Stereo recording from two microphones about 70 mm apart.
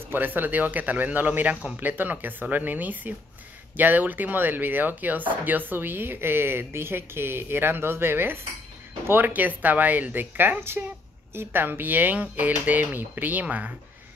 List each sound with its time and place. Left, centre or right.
0.0 s speech: right